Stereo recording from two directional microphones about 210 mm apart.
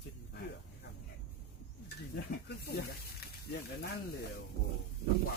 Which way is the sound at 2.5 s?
50° left (ahead or behind).